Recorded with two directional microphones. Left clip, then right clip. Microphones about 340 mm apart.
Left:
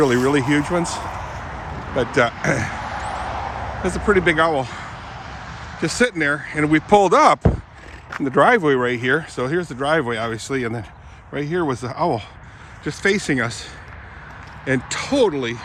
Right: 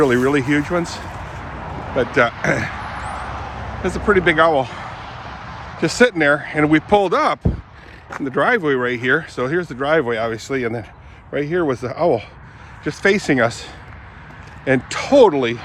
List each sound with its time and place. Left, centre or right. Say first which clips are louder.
0.0 s speech: right 1 dB; centre
3.0 s vehicle: left 1 dB; left
3.8 s speech: right 2 dB; centre
5.1 s vehicle: right 2 dB; centre
5.8 s speech: right 4 dB; centre